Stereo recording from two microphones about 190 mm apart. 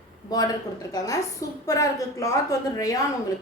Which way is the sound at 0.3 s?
20° left (ahead or behind).